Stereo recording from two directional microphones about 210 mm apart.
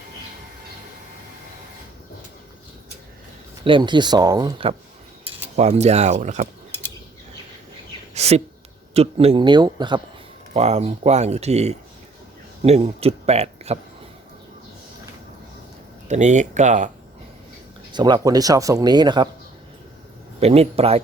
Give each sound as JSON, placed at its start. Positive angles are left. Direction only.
{"t": 3.6, "sound": "speech", "side_deg": -25}
{"t": 5.5, "sound": "speech", "side_deg": -30}
{"t": 8.1, "sound": "a sound", "side_deg": -30}
{"t": 8.9, "sound": "speech", "side_deg": -30}
{"t": 10.5, "sound": "speech", "side_deg": -30}
{"t": 16.0, "sound": "speech", "side_deg": -35}
{"t": 17.9, "sound": "speech", "side_deg": -20}
{"t": 20.4, "sound": "speech", "side_deg": -30}